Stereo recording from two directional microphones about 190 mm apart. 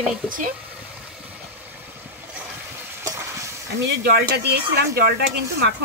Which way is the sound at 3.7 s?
60° right (ahead or behind).